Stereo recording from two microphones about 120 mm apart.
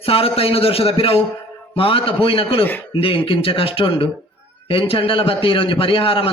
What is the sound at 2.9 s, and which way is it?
A man's voice, 50° left (ahead or behind).